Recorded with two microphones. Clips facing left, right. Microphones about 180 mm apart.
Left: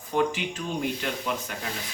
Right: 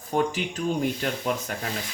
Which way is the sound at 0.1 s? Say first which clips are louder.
Even; 40° right (ahead or behind).